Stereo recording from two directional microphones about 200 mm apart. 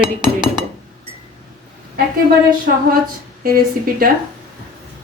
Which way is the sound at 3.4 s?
45° right (ahead or behind).